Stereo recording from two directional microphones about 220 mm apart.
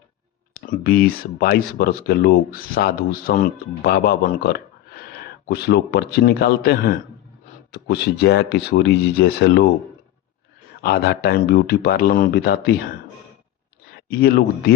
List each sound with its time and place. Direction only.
0.5 s speech: 40° left (ahead or behind)
10.8 s speech: 45° left (ahead or behind)
13.9 s speech: 45° left (ahead or behind)